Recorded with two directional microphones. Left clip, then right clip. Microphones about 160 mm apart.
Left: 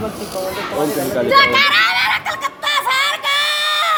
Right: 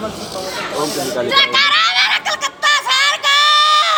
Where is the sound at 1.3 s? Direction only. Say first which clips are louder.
Left 1 dB; 30° left (ahead or behind).